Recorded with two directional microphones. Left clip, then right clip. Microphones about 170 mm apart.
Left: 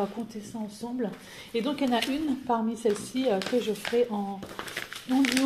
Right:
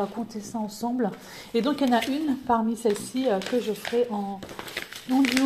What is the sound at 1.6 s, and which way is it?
Speech, 15° right (ahead or behind).